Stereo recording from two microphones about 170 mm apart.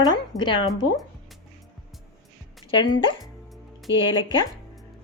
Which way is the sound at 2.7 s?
25° left (ahead or behind).